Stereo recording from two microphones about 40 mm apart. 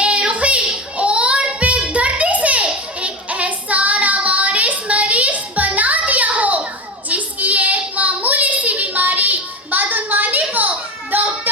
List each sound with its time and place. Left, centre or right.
0.0 s child singing: right
1.9 s music: right
3.0 s child singing: right
11.1 s music: right